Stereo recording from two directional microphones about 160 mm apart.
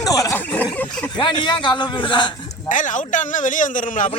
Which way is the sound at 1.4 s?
30° left (ahead or behind).